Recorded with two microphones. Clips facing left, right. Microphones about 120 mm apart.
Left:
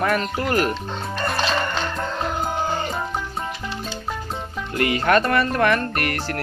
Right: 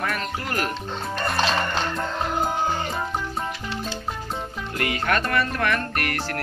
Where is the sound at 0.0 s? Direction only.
25° left (ahead or behind).